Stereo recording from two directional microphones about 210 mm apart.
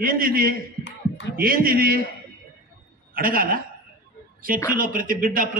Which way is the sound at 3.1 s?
45° right (ahead or behind).